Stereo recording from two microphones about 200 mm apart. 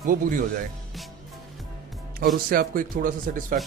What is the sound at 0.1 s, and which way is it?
Speech, 40° right (ahead or behind).